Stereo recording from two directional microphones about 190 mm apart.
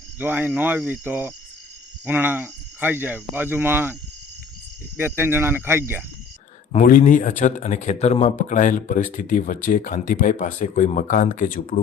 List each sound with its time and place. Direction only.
0.2 s speech: 10° right (ahead or behind)
4.9 s speech: 10° right (ahead or behind)
6.7 s speech: 45° left (ahead or behind)